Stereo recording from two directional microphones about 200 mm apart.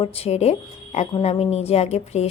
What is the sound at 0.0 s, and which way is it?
A woman's voice, 30° left (ahead or behind).